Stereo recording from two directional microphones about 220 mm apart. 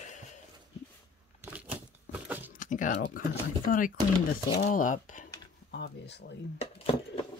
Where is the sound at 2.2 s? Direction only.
10° right (ahead or behind).